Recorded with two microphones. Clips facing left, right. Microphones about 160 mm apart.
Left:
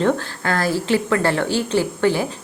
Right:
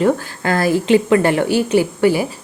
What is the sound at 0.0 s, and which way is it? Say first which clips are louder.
A woman's voice: right 3 dB; 15° right (ahead or behind).